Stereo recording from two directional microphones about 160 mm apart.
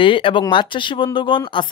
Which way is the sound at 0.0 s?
35° left (ahead or behind).